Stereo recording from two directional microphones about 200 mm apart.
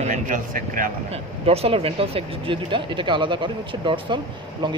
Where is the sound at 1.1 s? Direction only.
30° right (ahead or behind).